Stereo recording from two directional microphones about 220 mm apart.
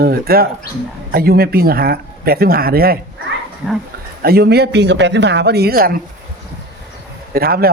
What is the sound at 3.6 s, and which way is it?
Speech, 5° right (ahead or behind).